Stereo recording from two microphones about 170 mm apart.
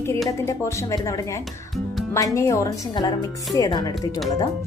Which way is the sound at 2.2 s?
20° left (ahead or behind).